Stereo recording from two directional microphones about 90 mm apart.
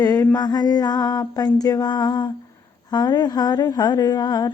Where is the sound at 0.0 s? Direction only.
45° left (ahead or behind).